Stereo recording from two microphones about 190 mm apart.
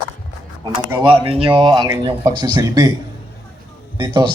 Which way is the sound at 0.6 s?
25° right (ahead or behind).